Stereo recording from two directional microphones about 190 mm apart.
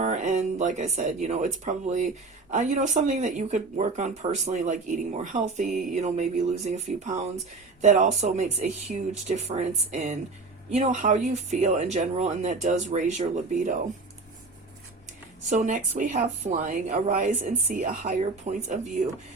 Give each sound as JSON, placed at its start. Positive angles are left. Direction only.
{"t": 0.0, "sound": "speech", "side_deg": -40}
{"t": 15.4, "sound": "speech", "side_deg": -40}